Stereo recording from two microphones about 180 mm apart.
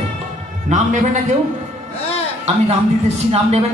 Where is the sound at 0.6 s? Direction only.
40° right (ahead or behind).